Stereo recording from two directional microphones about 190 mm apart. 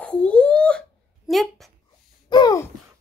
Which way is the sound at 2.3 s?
20° left (ahead or behind).